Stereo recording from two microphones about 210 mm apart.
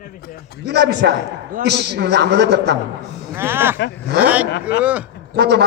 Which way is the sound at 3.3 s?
10° right (ahead or behind).